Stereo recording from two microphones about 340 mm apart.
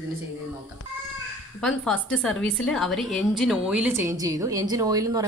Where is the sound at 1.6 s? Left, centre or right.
Centre.